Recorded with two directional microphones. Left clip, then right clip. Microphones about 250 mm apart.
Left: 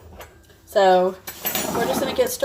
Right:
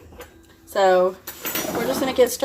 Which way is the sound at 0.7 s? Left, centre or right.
Right.